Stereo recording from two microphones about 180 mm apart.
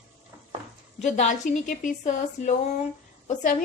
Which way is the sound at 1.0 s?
40° left (ahead or behind).